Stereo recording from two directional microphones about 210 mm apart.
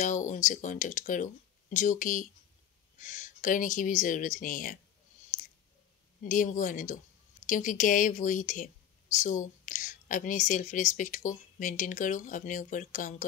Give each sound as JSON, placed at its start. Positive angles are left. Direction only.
{"t": 0.0, "sound": "speech", "side_deg": 35}
{"t": 6.2, "sound": "speech", "side_deg": 40}